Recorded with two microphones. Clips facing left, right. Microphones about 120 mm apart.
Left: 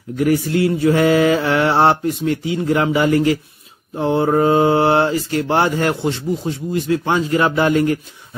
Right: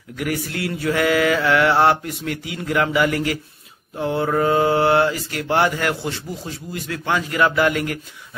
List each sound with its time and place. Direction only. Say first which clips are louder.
0.1 s mantra: left 9 dB; 30° left (ahead or behind)